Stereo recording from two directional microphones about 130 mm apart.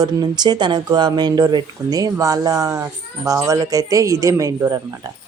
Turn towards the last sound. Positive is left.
turn(degrees=-25)  # may be behind; listen again after turning